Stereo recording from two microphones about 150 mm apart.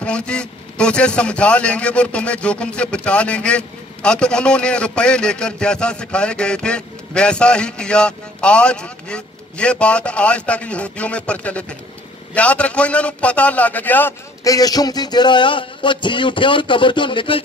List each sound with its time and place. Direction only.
0.0 s a man's voice: 5° left (ahead or behind)
14.4 s a man's voice: 25° left (ahead or behind)